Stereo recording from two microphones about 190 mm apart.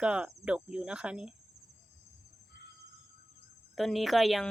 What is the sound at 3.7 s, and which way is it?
Speech, centre (ahead or behind).